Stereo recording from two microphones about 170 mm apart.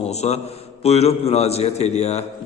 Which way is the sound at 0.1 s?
40° left (ahead or behind).